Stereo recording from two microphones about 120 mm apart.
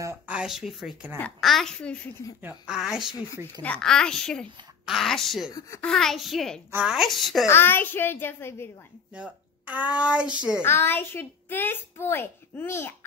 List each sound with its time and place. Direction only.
0.3 s a woman's voice: 5° right (ahead or behind)
2.4 s a woman's voice: 5° right (ahead or behind)
3.6 s a woman's voice: 5° left (ahead or behind)
7.4 s a child's voice: 20° left (ahead or behind)
9.1 s a child's voice: 10° right (ahead or behind)
10.6 s a child's voice: 20° left (ahead or behind)